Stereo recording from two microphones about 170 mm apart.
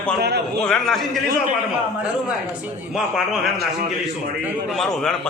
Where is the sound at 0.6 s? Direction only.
5° left (ahead or behind).